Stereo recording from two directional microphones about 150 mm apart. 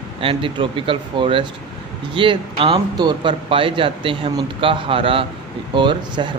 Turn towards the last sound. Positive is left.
turn(degrees=-30)  # may be behind; listen again after turning